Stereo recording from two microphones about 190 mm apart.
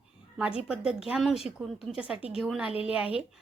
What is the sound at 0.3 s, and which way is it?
A woman's voice, 5° right (ahead or behind).